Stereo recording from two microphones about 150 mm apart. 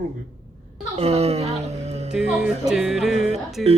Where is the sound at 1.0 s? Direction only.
45° right (ahead or behind).